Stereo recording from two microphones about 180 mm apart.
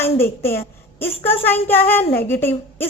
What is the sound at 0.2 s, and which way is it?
A woman's voice, 15° left (ahead or behind).